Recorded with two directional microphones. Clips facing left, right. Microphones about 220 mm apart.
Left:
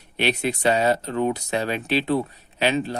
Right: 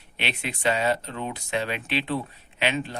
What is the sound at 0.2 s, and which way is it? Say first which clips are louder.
Speech: left 8 dB; 40° left (ahead or behind).